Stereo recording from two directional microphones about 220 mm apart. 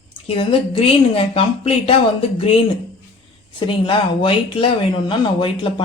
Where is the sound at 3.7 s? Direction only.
25° left (ahead or behind).